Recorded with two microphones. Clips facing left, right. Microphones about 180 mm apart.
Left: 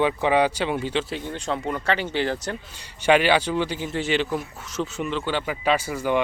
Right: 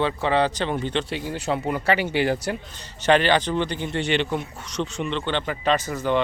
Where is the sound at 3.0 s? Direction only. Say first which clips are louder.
Even; 10° left (ahead or behind).